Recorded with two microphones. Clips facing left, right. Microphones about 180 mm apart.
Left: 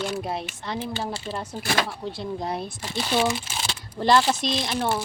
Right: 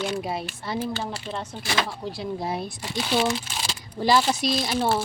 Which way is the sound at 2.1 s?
Centre (ahead or behind).